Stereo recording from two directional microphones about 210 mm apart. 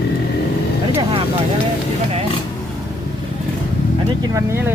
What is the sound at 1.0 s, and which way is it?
Vehicle, 25° right (ahead or behind).